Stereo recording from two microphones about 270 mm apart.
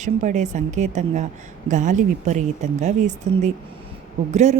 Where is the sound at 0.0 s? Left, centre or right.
Right.